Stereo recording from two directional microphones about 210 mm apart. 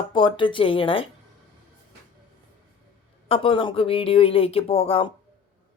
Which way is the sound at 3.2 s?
25° left (ahead or behind).